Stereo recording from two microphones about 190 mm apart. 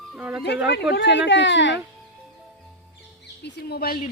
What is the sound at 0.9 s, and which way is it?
Speech, 70° left (ahead or behind).